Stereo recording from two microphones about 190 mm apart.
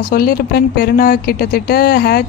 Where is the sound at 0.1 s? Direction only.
50° left (ahead or behind).